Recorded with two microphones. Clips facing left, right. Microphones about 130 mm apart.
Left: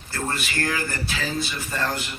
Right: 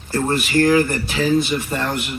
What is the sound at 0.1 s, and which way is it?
Speech, 30° right (ahead or behind).